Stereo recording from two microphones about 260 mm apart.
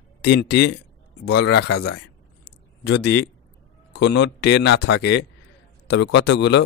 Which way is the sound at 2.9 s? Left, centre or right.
Left.